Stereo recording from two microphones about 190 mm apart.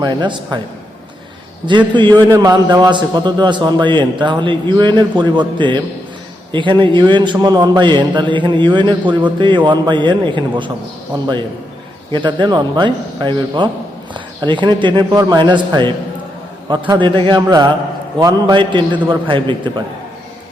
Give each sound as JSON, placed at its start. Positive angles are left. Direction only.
{"t": 0.0, "sound": "a man's voice", "side_deg": -25}
{"t": 1.9, "sound": "a man's voice", "side_deg": -25}
{"t": 12.1, "sound": "a man's voice", "side_deg": -25}
{"t": 16.9, "sound": "a man's voice", "side_deg": -25}